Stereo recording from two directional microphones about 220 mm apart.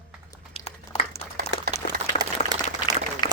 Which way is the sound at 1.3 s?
40° right (ahead or behind).